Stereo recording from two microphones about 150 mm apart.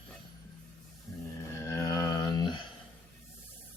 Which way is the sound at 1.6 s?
20° left (ahead or behind).